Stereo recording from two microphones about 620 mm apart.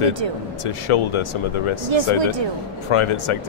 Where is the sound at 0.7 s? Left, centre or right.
Left.